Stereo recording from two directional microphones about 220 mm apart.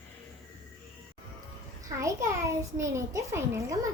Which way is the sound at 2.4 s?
15° right (ahead or behind).